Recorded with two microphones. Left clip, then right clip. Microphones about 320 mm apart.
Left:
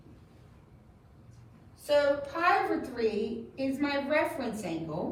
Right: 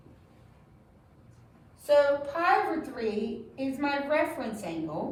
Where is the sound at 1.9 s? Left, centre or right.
Centre.